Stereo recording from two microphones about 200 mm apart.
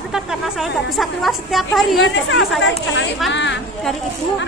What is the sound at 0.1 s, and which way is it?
A child's voice, centre (ahead or behind).